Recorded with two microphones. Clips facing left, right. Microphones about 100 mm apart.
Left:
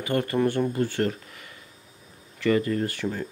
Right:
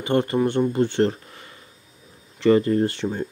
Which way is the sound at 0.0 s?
25° right (ahead or behind).